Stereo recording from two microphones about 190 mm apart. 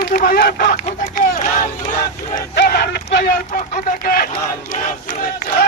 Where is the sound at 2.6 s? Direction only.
55° left (ahead or behind).